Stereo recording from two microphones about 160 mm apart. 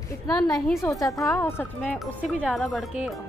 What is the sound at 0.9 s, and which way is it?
A woman's voice, 20° left (ahead or behind).